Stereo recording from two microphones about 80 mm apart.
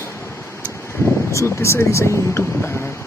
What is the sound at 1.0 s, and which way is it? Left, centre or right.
Speech, left.